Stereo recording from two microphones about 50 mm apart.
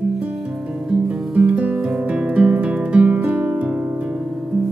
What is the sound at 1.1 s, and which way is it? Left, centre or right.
Guitar, centre.